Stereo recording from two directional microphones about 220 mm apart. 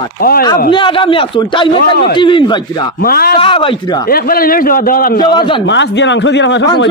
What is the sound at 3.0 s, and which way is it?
Speech, 45° left (ahead or behind).